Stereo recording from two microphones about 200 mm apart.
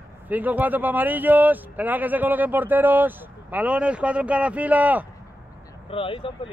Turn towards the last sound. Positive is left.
turn(degrees=25)  # may be behind; listen again after turning